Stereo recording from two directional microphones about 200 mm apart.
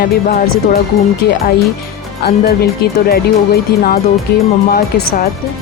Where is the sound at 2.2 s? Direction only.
50° left (ahead or behind).